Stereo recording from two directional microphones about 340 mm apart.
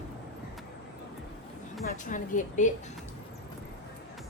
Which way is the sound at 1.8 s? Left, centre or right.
Left.